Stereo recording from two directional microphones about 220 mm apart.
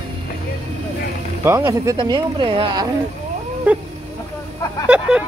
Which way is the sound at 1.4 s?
10° right (ahead or behind).